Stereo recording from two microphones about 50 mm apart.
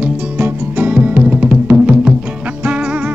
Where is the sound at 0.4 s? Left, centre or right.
Right.